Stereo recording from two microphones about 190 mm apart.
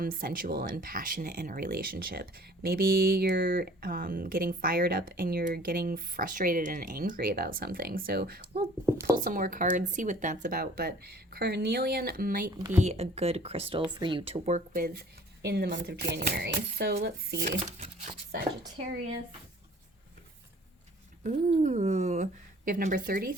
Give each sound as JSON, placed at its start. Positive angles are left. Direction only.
{"t": 0.0, "sound": "speech", "side_deg": -50}
{"t": 12.7, "sound": "a woman's voice", "side_deg": -35}
{"t": 21.2, "sound": "a woman's voice", "side_deg": -40}